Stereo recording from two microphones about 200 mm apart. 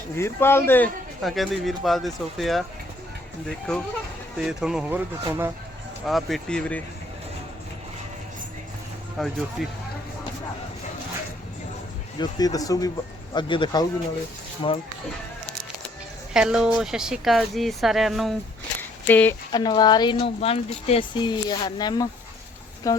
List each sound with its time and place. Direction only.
0.2 s speech: 10° left (ahead or behind)
1.2 s speech: centre (ahead or behind)
3.7 s speech: 5° left (ahead or behind)
6.1 s speech: centre (ahead or behind)
9.2 s speech: centre (ahead or behind)
12.2 s speech: 20° left (ahead or behind)
16.3 s speech: 5° right (ahead or behind)
18.8 s a sound: 10° left (ahead or behind)
19.5 s speech: 20° left (ahead or behind)